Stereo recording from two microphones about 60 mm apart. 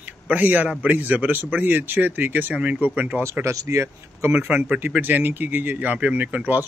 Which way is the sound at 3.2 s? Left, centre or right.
Right.